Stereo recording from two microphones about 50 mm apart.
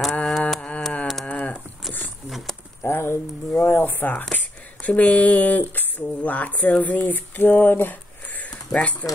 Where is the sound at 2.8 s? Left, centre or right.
Left.